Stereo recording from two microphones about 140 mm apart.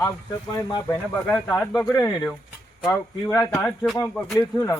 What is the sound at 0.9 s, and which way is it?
A man's voice, 15° left (ahead or behind).